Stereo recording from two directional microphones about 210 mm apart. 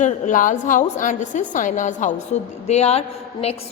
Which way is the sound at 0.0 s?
40° left (ahead or behind).